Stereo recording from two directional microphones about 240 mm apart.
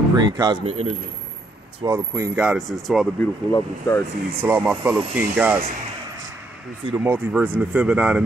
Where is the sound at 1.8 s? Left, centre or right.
Centre.